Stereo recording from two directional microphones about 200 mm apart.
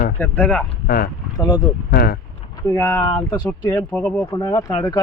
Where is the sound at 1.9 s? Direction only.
50° left (ahead or behind).